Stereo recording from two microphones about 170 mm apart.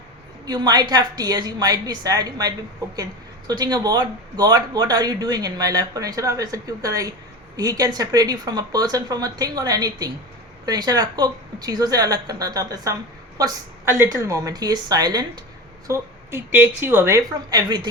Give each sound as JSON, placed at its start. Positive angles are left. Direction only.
{"t": 0.4, "sound": "a woman's voice", "side_deg": -25}